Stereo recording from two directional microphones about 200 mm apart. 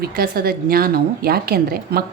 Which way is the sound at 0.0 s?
50° right (ahead or behind).